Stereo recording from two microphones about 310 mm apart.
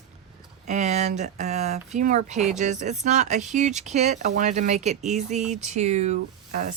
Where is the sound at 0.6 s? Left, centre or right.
Right.